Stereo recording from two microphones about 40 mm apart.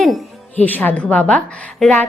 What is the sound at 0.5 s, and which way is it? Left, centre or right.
Speech, left.